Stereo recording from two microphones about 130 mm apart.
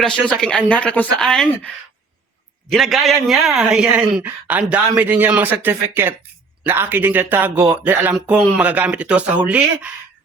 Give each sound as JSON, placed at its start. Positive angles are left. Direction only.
{"t": 0.0, "sound": "speech", "side_deg": 5}